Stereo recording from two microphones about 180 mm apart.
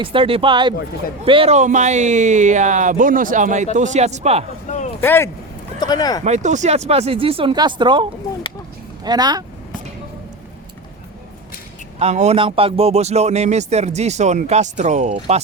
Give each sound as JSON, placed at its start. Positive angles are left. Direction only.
{"t": 0.0, "sound": "a man's voice", "side_deg": -30}
{"t": 4.9, "sound": "speech", "side_deg": 10}
{"t": 6.2, "sound": "a man's voice", "side_deg": -40}
{"t": 9.0, "sound": "speech", "side_deg": -20}
{"t": 11.9, "sound": "a man's voice", "side_deg": -40}